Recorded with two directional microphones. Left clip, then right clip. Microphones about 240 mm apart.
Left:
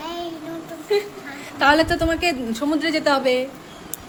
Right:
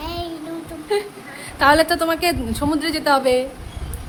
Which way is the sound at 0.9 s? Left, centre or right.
Centre.